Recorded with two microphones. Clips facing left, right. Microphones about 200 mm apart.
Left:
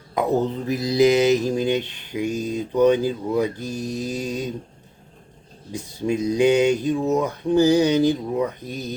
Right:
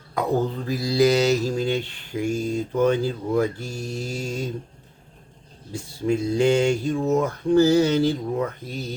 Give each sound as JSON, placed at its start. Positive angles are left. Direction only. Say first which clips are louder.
{"t": 0.1, "sound": "mantra", "louder": "left 2 dB", "side_deg": 20}
{"t": 5.7, "sound": "speech", "louder": "even", "side_deg": 15}